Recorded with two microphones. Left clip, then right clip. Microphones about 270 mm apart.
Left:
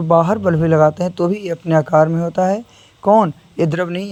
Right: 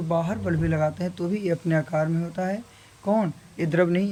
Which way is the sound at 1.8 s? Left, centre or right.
Left.